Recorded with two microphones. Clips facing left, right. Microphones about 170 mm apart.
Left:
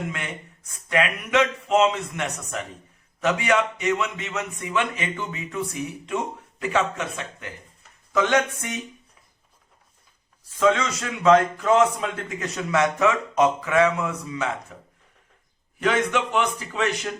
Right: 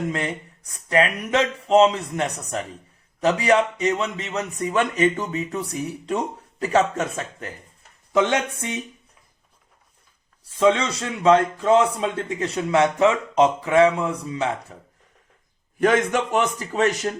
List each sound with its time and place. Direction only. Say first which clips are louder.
0.1 s speech: right 7 dB; 35° right (ahead or behind)
8.1 s a man's voice: right 1 dB; 25° right (ahead or behind)
10.6 s a man's voice: right 2 dB; 30° right (ahead or behind)
15.8 s a man's voice: right 3 dB; 45° right (ahead or behind)